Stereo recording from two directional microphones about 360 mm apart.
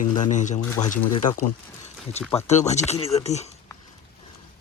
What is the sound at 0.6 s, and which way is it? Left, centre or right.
Speech, centre.